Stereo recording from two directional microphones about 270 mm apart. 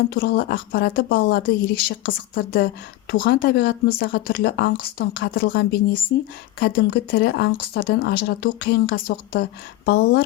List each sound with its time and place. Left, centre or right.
0.1 s speech: left